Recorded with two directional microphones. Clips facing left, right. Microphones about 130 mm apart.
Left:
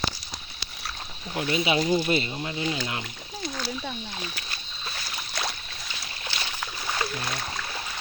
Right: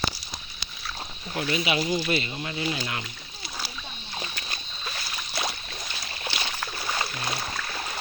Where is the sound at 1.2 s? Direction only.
15° left (ahead or behind).